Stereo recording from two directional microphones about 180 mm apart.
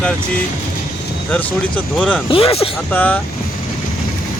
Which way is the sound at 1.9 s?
5° left (ahead or behind).